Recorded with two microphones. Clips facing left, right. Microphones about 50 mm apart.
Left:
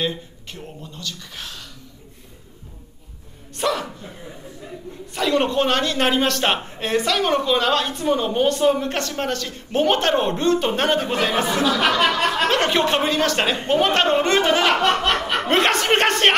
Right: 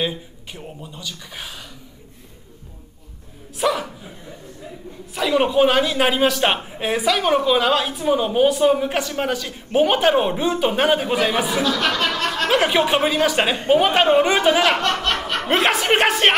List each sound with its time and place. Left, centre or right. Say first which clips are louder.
0.0 s a man's voice: right 1 dB; centre
3.5 s a woman's voice: right 2 dB; centre
5.1 s a man's voice: right 2 dB; centre
11.6 s speech: left 2 dB; centre
12.4 s a man's voice: right 5 dB; centre